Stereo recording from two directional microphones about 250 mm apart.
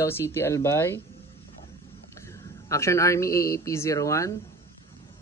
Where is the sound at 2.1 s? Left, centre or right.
Centre.